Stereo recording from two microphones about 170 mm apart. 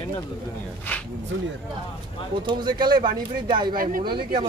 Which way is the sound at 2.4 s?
25° right (ahead or behind).